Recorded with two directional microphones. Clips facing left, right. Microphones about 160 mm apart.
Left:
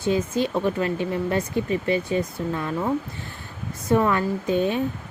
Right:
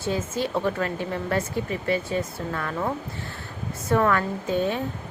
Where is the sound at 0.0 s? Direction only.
15° left (ahead or behind).